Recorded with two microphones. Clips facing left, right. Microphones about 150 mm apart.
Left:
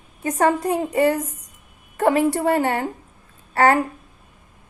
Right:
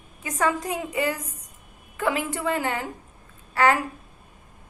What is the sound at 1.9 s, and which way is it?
Speech, 40° left (ahead or behind).